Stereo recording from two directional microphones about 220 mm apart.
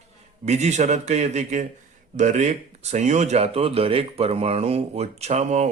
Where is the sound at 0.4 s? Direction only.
30° right (ahead or behind).